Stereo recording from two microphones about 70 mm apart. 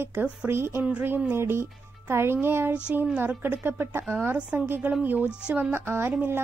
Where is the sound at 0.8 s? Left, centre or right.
Right.